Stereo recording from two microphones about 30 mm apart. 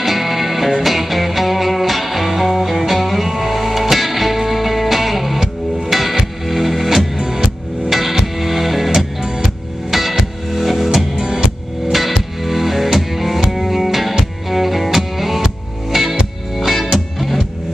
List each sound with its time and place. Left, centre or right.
0.0 s music: centre
7.2 s music: centre
7.9 s music: centre
11.1 s music: right
11.9 s music: centre